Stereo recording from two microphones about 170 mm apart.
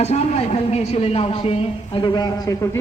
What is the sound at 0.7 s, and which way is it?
A man's voice, 35° left (ahead or behind).